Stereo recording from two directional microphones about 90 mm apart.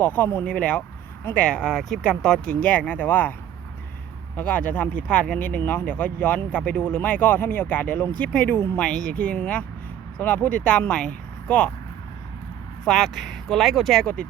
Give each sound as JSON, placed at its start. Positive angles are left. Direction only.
{"t": 0.0, "sound": "speech", "side_deg": 20}
{"t": 4.4, "sound": "speech", "side_deg": 15}
{"t": 8.5, "sound": "speech", "side_deg": 25}
{"t": 12.8, "sound": "speech", "side_deg": 0}